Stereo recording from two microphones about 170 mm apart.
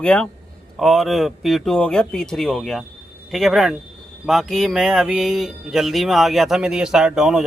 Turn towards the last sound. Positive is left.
turn(degrees=0)  # may be behind; listen again after turning